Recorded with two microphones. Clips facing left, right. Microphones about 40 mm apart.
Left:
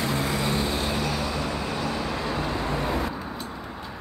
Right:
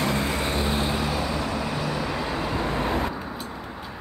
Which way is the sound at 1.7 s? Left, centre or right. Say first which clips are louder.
Right 1 dB; centre.